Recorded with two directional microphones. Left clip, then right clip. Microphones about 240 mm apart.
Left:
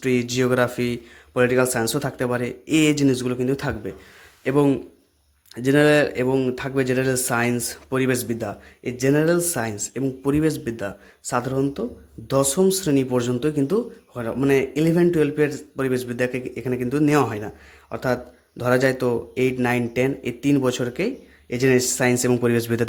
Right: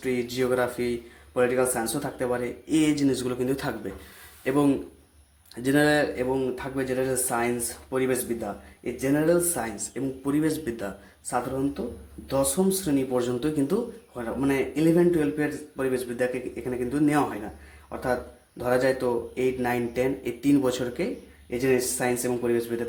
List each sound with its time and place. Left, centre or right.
0.0 s a man's voice: left
11.8 s speech: left